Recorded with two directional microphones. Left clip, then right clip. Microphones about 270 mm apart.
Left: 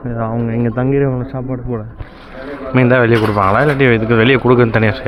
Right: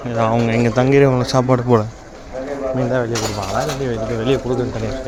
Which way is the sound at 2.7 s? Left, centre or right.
Left.